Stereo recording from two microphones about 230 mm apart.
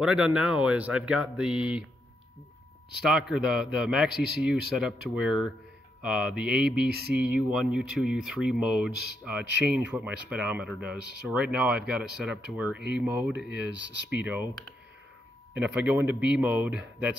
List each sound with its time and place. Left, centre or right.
0.0 s a man's voice: centre
3.1 s a man's voice: centre
6.9 s speech: right
7.2 s a man's voice: centre
15.5 s speech: centre